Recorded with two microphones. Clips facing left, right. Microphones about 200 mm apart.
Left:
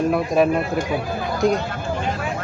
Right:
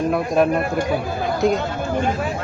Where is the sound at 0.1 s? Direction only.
Centre (ahead or behind).